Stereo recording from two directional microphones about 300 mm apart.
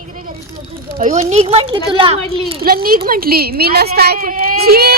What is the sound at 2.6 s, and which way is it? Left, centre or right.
A woman's voice, right.